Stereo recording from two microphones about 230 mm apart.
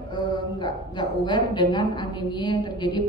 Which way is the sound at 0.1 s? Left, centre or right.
Centre.